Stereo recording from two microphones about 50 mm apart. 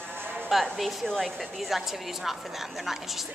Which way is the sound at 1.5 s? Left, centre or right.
Centre.